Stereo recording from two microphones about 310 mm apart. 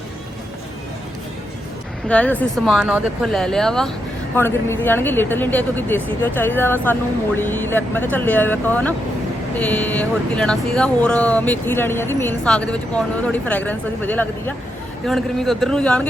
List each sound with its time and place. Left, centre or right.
2.0 s a woman's voice: centre